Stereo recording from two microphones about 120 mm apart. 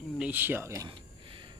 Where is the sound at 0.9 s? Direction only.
45° right (ahead or behind).